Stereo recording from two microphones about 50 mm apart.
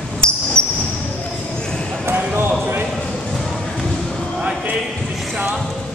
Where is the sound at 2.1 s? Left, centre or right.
Right.